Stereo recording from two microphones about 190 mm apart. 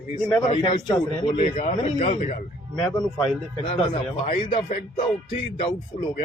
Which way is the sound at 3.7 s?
30° left (ahead or behind).